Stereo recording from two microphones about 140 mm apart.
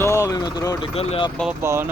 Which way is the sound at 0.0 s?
20° left (ahead or behind).